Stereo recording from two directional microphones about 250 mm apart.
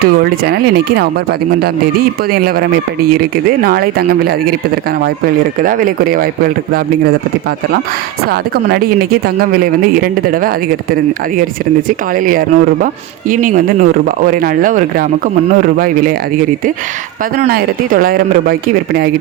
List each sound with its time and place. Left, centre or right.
0.0 s speech: right
5.6 s speech: right
8.3 s speech: right
11.9 s speech: right
17.3 s speech: right